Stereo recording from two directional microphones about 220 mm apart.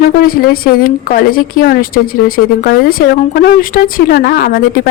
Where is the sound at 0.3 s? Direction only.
40° left (ahead or behind).